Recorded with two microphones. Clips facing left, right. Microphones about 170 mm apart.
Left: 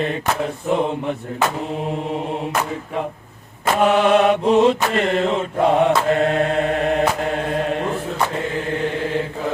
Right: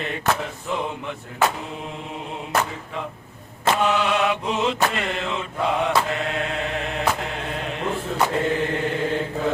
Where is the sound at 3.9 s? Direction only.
45° left (ahead or behind).